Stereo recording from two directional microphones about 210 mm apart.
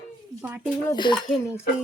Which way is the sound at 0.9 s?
20° left (ahead or behind).